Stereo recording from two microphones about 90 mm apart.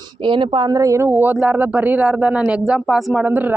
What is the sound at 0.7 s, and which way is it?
Speech, 40° right (ahead or behind).